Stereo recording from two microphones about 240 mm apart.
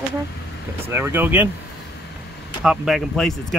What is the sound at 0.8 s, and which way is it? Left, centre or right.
Speech, centre.